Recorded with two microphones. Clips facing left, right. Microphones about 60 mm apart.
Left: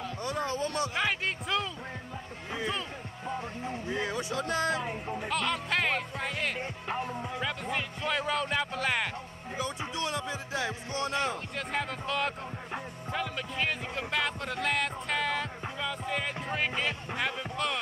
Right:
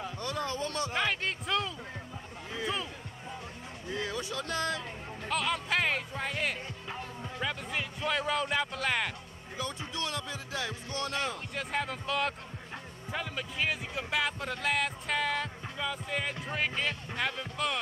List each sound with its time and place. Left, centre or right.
0.2 s speech: left
0.9 s speech: centre
3.3 s music: left
3.9 s speech: left
5.3 s speech: centre
6.6 s music: left
7.7 s speech: centre
9.6 s speech: left
11.5 s speech: centre